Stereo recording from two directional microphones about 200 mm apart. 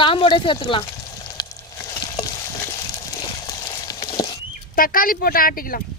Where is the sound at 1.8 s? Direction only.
20° left (ahead or behind).